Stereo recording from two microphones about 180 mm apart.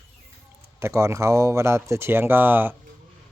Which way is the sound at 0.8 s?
15° right (ahead or behind).